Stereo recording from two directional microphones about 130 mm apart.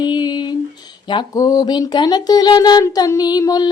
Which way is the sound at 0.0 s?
35° left (ahead or behind).